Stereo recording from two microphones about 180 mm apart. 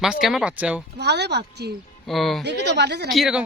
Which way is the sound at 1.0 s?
65° right (ahead or behind).